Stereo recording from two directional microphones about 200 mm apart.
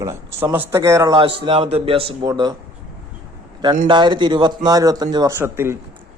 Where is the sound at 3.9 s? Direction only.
20° right (ahead or behind).